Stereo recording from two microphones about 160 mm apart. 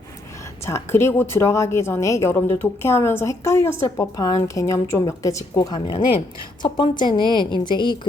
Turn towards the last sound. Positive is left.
turn(degrees=30)  # may be behind; listen again after turning